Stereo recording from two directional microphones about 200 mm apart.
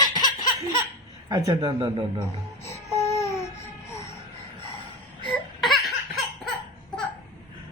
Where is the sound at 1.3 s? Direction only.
20° right (ahead or behind).